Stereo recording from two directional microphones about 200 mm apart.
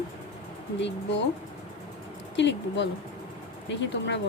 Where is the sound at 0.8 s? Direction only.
60° left (ahead or behind).